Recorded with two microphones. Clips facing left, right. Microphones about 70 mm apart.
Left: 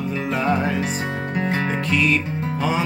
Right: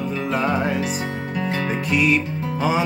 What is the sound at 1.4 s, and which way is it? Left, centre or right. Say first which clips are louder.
Music: left 1 dB; left.